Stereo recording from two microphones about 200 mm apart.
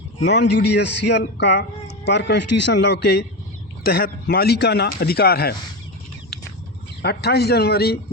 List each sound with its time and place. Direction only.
0.2 s a man's voice: 60° left (ahead or behind)
7.0 s speech: 55° left (ahead or behind)